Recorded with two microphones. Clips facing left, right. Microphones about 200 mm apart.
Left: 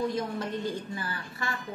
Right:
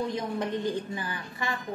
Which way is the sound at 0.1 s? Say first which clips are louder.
Right 1 dB; 15° right (ahead or behind).